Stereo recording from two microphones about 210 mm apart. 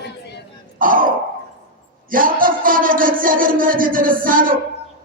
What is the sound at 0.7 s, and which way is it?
Speech, 40° right (ahead or behind).